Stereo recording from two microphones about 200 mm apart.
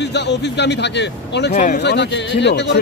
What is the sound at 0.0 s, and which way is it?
Speech, 60° left (ahead or behind).